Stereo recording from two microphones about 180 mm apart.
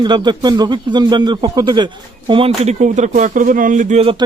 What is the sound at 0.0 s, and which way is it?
Speech, 25° right (ahead or behind).